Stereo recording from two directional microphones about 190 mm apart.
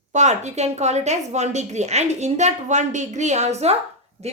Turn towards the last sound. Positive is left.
turn(degrees=-35)  # may be behind; listen again after turning